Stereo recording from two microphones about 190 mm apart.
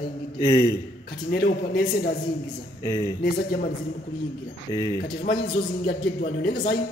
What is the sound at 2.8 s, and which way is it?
Speech, 20° left (ahead or behind).